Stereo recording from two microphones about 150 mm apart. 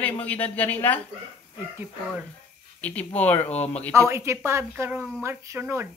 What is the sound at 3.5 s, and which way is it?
Speech, 45° left (ahead or behind).